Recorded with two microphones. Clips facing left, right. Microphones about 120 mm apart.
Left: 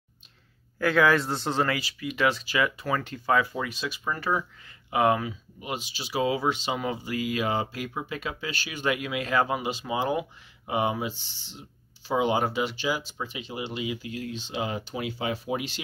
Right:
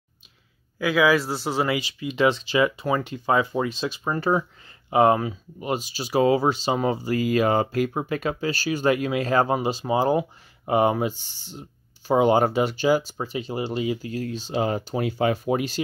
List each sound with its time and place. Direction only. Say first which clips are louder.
0.7 s speech: right 2 dB; 5° right (ahead or behind); by 10.2 s 35° right (ahead or behind)
10.6 s speech: right 7 dB; 50° right (ahead or behind)